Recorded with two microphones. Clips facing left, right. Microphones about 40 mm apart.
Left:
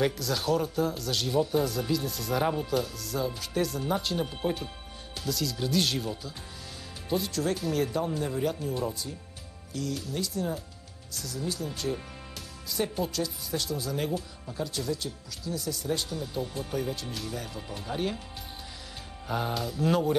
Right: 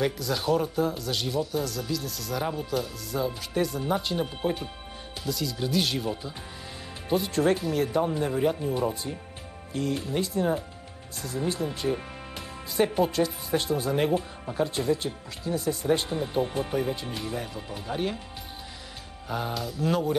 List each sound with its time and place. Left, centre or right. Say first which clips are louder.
0.0 s speech: right 1 dB; centre
1.3 s speech: left 5 dB; centre
7.1 s speech: right 5 dB; right
7.6 s speech: right 2 dB; centre
7.9 s speech: right 4 dB; centre
9.8 s speech: right 5 dB; right
11.7 s speech: right 4 dB; centre
12.6 s speech: right 6 dB; right; by 18.2 s centre
19.2 s speech: even; centre